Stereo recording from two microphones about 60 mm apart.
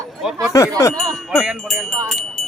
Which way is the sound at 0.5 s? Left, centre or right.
Left.